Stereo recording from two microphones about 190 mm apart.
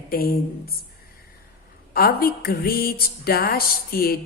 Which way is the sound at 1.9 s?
50° left (ahead or behind).